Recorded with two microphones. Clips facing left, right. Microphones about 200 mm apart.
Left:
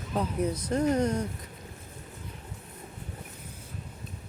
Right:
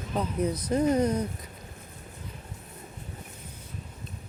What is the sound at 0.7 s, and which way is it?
Speech, 5° right (ahead or behind).